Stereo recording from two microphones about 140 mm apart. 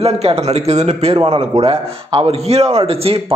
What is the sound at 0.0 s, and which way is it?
Speech, 45° right (ahead or behind).